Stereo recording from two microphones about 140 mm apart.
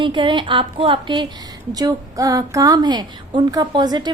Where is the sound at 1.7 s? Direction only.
25° right (ahead or behind).